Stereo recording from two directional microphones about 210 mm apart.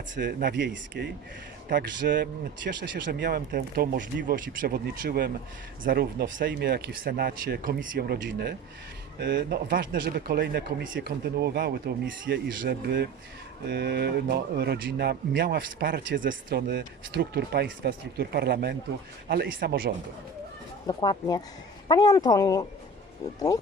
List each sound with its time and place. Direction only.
0.2 s speech: 45° right (ahead or behind)
20.8 s speech: 20° left (ahead or behind)